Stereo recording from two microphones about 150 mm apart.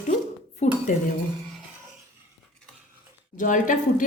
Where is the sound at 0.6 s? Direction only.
50° left (ahead or behind).